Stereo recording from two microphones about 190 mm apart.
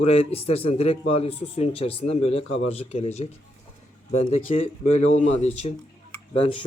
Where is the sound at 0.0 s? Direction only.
30° left (ahead or behind).